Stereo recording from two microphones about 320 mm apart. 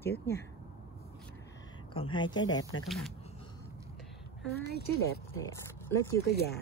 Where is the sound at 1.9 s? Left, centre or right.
Centre.